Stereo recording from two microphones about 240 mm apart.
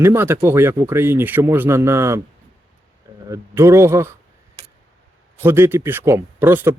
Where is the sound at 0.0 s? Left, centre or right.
Centre.